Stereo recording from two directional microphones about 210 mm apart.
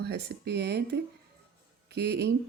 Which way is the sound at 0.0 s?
50° right (ahead or behind).